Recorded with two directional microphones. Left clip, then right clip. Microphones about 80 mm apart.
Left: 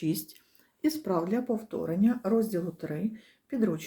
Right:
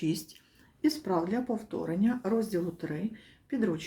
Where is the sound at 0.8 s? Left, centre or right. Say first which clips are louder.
Even; left.